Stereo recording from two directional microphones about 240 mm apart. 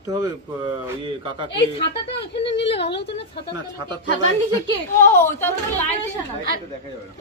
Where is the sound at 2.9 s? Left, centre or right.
Left.